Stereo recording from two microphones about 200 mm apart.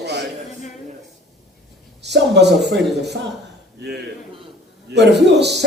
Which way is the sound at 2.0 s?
60° right (ahead or behind).